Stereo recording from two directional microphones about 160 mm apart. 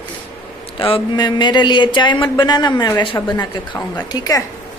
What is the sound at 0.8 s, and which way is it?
Speech, 35° left (ahead or behind).